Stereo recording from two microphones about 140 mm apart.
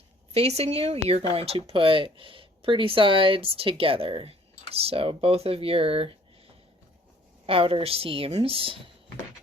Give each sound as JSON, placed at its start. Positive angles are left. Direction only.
{"t": 0.3, "sound": "speech", "side_deg": -50}
{"t": 7.4, "sound": "a woman's voice", "side_deg": -40}